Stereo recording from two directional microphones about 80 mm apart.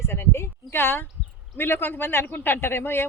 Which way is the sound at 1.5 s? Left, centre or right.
Left.